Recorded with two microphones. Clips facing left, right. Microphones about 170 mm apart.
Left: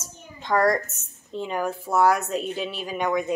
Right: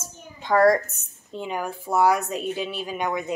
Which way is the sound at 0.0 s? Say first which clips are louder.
Right 1 dB; 5° right (ahead or behind).